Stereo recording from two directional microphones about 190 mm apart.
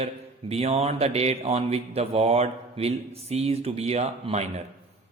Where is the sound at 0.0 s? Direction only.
35° right (ahead or behind).